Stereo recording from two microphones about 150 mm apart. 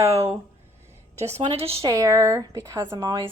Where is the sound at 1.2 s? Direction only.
40° right (ahead or behind).